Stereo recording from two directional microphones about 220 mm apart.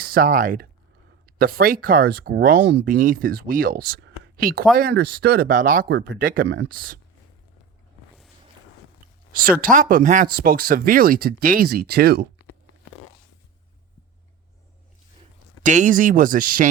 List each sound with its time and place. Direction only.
0.0 s speech: 40° right (ahead or behind)
9.4 s speech: 40° right (ahead or behind)
15.6 s speech: 35° right (ahead or behind)